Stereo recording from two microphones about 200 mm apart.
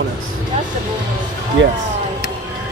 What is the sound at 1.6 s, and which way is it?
Speech, 65° right (ahead or behind).